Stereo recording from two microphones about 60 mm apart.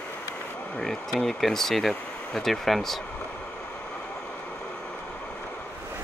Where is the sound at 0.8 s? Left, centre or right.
Centre.